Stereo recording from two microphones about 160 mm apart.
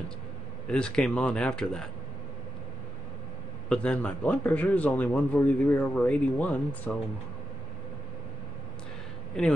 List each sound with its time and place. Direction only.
0.7 s speech: 5° left (ahead or behind)
3.6 s a man's voice: 5° left (ahead or behind)